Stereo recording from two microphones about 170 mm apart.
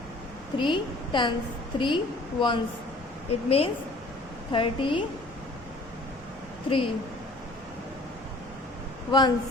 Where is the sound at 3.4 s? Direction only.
35° left (ahead or behind).